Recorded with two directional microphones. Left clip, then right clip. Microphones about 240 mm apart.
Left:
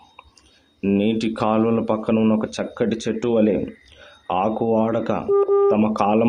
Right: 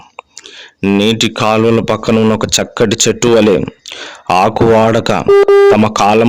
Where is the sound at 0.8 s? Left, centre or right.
Right.